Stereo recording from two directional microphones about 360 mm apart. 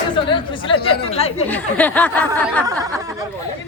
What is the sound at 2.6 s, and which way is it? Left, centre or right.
Speech, centre.